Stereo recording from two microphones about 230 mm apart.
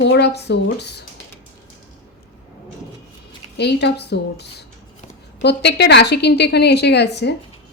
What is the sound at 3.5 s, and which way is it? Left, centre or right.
A woman's voice, left.